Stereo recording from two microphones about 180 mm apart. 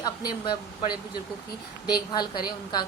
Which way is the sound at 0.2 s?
25° left (ahead or behind).